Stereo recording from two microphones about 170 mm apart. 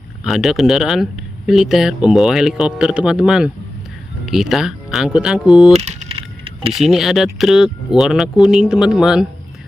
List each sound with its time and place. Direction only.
0.2 s speech: centre (ahead or behind)
5.8 s a sound: 40° right (ahead or behind)
6.7 s speech: centre (ahead or behind)